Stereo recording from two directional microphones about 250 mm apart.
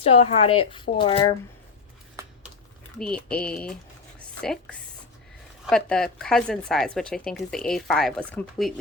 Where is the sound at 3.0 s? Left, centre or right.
Centre.